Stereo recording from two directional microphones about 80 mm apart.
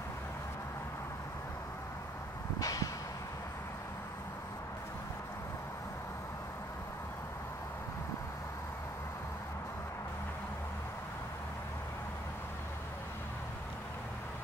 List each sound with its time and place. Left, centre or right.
2.6 s vehicle: left